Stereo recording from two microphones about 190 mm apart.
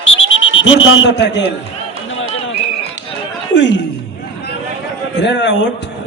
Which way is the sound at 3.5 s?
70° left (ahead or behind).